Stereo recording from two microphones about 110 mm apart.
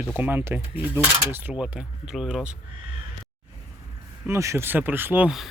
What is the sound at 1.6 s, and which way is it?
Speech, 5° right (ahead or behind).